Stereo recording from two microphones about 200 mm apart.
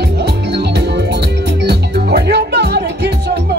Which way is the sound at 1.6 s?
55° right (ahead or behind).